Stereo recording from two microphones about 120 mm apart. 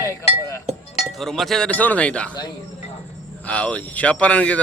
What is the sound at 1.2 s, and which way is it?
Speech, centre (ahead or behind).